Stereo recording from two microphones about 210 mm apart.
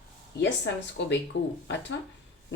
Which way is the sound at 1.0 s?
55° left (ahead or behind).